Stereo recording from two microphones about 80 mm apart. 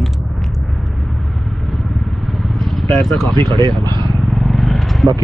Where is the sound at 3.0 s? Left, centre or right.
Centre.